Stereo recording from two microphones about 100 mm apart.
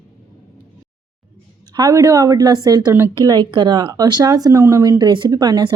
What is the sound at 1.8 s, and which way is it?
A woman's voice, 35° right (ahead or behind).